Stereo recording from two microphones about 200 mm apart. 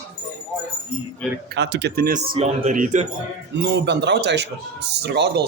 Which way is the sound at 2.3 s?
35° right (ahead or behind).